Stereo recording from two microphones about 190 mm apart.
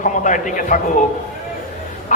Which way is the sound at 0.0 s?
40° left (ahead or behind).